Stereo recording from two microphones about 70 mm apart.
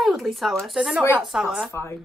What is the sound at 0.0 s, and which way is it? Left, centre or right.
Speech, centre.